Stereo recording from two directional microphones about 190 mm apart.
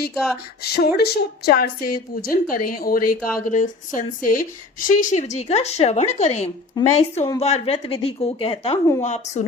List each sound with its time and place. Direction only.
0.1 s speech: centre (ahead or behind)
0.6 s a woman's voice: 55° left (ahead or behind); by 9.5 s 35° left (ahead or behind)